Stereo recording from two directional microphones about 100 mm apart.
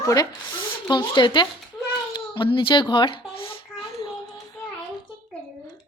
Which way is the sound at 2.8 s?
50° left (ahead or behind).